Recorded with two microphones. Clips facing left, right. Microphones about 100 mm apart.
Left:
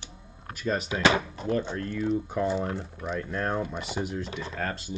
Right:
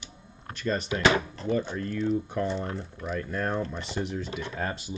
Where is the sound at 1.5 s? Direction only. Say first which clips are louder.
Even; 5° right (ahead or behind).